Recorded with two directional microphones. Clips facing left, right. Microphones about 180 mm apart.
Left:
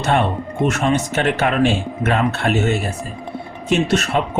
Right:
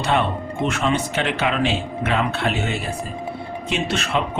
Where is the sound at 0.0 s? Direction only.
45° left (ahead or behind).